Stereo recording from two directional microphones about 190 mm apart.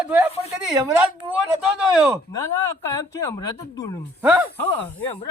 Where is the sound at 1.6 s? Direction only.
Centre (ahead or behind).